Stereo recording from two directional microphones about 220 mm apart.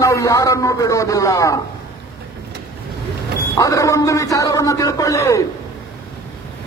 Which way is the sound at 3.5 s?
15° left (ahead or behind).